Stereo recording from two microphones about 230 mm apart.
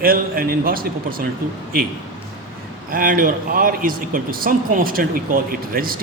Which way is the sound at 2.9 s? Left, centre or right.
Right.